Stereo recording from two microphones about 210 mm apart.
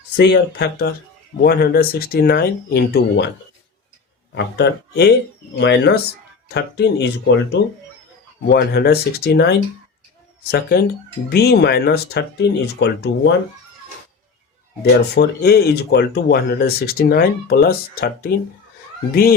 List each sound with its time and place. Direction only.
0.2 s speech: 55° left (ahead or behind)
4.4 s speech: 50° left (ahead or behind)
8.4 s speech: 50° left (ahead or behind)
14.8 s speech: 50° left (ahead or behind)